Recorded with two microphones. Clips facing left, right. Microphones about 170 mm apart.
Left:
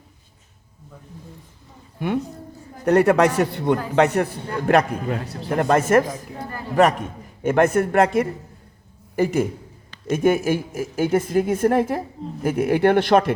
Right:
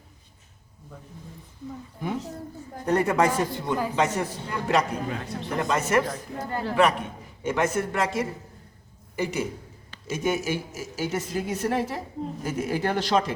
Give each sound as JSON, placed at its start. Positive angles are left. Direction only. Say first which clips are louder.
{"t": 2.0, "sound": "a man's voice", "louder": "left 7 dB", "side_deg": 75}
{"t": 4.4, "sound": "a man's voice", "louder": "left 5 dB", "side_deg": 55}
{"t": 7.4, "sound": "a woman's voice", "louder": "left 7 dB", "side_deg": 60}